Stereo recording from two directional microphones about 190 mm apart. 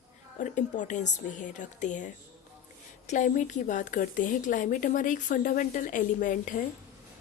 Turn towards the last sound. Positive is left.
turn(degrees=45)  # may be behind; listen again after turning